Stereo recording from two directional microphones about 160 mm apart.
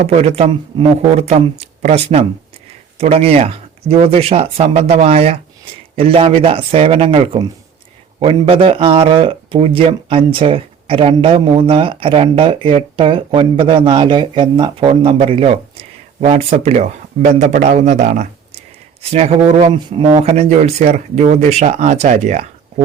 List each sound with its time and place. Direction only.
0.0 s a man's voice: 40° right (ahead or behind)
20.1 s speech: 45° right (ahead or behind)